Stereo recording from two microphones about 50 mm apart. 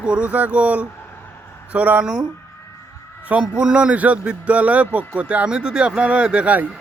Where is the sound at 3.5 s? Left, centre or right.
Centre.